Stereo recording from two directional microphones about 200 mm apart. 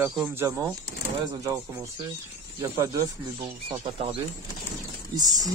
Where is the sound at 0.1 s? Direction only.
10° right (ahead or behind).